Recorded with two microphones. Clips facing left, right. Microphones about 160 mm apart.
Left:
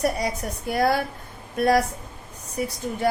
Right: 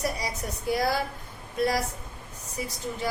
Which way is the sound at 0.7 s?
55° left (ahead or behind).